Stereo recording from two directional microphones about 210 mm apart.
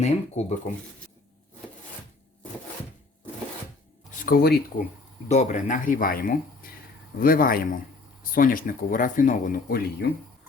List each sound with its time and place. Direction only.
0.0 s speech: 30° left (ahead or behind)
4.1 s speech: 40° left (ahead or behind)
5.3 s a man's voice: 35° left (ahead or behind)